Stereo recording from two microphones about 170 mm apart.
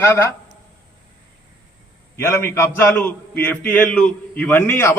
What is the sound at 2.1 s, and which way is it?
A man's voice, 15° left (ahead or behind).